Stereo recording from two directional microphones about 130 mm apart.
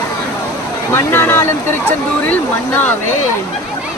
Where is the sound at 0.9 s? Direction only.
15° left (ahead or behind).